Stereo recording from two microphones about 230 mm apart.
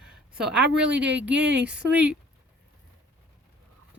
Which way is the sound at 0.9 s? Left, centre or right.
Right.